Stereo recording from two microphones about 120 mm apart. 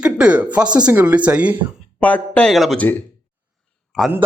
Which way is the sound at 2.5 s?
Centre (ahead or behind).